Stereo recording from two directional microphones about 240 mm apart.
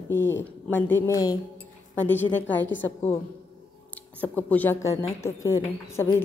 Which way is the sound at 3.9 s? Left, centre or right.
Centre.